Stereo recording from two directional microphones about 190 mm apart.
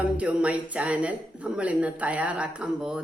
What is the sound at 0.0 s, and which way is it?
A woman's voice, 5° right (ahead or behind).